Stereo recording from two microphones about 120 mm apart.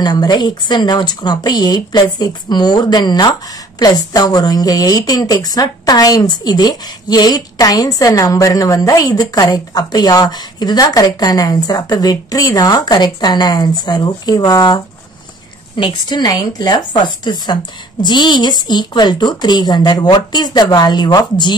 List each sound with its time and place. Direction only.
0.0 s a woman's voice: 35° left (ahead or behind)
15.8 s a woman's voice: 35° left (ahead or behind)